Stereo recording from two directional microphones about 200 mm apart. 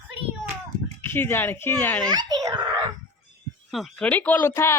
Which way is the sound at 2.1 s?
20° right (ahead or behind).